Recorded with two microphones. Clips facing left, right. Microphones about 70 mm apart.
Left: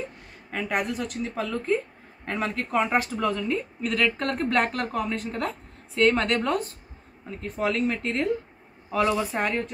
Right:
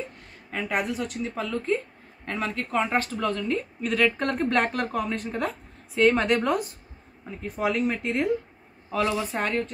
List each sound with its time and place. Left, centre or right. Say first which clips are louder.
0.5 s a woman's voice: even; centre
8.9 s a woman's voice: left 2 dB; centre